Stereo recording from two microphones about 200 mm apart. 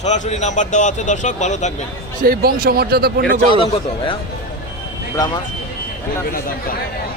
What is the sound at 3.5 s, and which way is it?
Speech, 25° left (ahead or behind).